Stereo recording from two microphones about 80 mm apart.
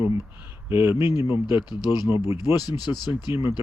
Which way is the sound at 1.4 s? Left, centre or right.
Left.